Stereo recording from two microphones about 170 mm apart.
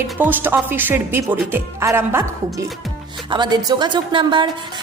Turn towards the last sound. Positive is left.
turn(degrees=-30)  # may be behind; listen again after turning